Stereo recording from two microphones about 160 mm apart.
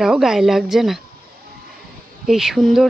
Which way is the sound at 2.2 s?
5° right (ahead or behind).